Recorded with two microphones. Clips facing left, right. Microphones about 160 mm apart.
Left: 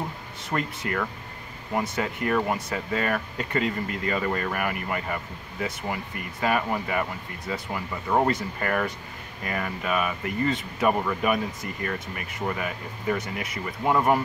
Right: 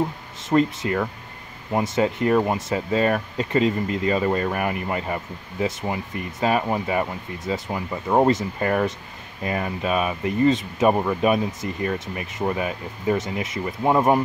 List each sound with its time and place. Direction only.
0.4 s speech: 25° right (ahead or behind)